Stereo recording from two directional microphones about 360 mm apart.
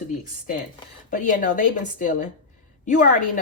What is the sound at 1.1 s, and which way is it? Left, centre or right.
Speech, left.